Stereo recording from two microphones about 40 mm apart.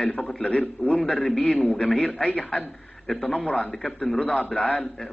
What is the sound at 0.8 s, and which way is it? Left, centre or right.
Speech, left.